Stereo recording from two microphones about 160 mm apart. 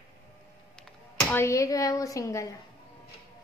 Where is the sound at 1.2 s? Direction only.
15° left (ahead or behind).